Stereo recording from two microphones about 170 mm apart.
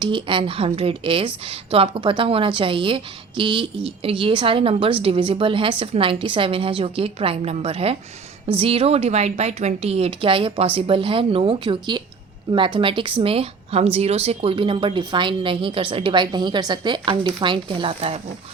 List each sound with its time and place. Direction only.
0.0 s a woman's voice: 30° right (ahead or behind)